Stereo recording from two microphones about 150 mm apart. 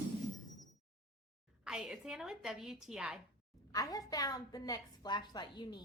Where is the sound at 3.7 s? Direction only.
25° left (ahead or behind).